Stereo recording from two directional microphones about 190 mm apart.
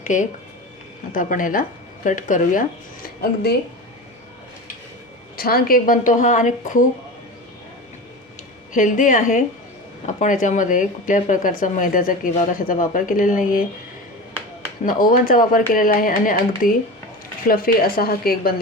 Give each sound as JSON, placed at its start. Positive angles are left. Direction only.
{"t": 0.0, "sound": "speech", "side_deg": 40}
{"t": 3.2, "sound": "speech", "side_deg": 55}
{"t": 5.4, "sound": "speech", "side_deg": 50}
{"t": 8.7, "sound": "speech", "side_deg": 45}
{"t": 14.8, "sound": "speech", "side_deg": 45}